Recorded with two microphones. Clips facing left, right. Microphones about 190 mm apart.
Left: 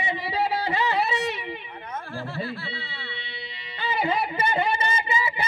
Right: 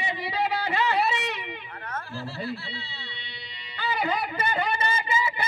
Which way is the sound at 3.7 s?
25° left (ahead or behind).